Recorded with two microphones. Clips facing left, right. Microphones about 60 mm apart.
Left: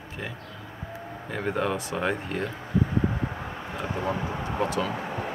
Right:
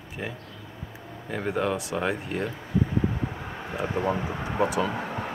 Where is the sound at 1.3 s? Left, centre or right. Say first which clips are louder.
Right 1 dB; centre.